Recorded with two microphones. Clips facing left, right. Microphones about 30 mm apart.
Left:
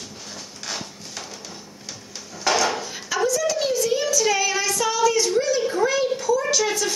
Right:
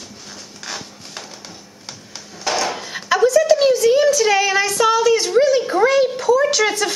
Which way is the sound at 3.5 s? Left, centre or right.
Right.